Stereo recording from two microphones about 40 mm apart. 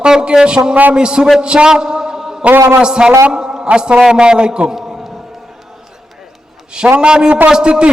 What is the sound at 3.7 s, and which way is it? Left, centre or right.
A man's voice, right.